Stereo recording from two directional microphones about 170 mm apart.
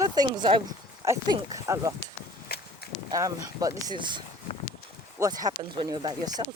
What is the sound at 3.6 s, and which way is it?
Speech, 25° right (ahead or behind).